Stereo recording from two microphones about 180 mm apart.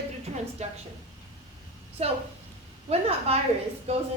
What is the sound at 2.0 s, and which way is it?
A woman's voice, 35° right (ahead or behind).